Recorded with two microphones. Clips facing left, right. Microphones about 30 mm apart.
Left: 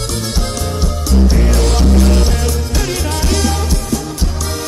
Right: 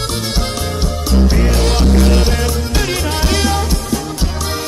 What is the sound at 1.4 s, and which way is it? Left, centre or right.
Music, right.